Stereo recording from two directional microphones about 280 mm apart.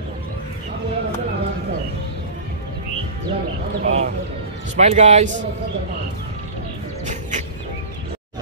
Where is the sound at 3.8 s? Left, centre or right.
Right.